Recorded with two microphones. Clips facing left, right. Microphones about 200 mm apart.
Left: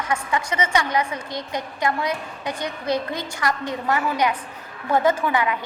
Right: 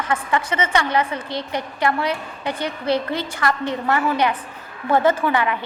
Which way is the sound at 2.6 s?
30° right (ahead or behind).